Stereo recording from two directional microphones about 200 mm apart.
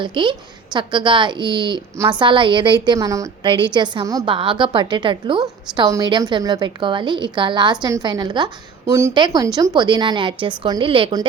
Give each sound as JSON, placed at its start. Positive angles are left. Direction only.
{"t": 0.0, "sound": "a woman's voice", "side_deg": -25}